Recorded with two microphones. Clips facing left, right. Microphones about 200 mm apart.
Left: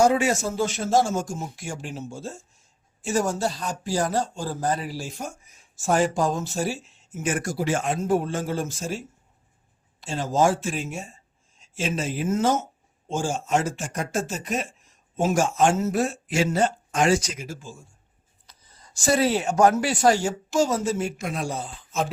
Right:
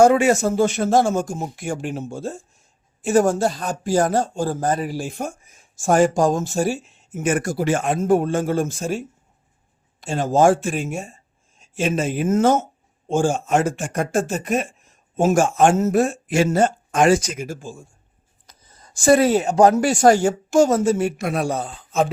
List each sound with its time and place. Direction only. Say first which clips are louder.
0.0 s speech: right 6 dB; 55° right (ahead or behind)